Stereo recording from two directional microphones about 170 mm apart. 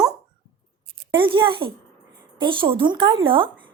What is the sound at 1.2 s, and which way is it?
Speech, 30° right (ahead or behind).